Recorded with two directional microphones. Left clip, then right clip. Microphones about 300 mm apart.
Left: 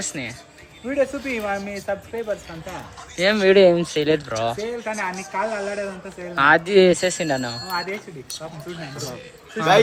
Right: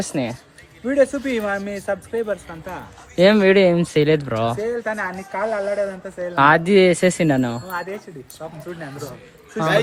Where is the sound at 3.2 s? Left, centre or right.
Centre.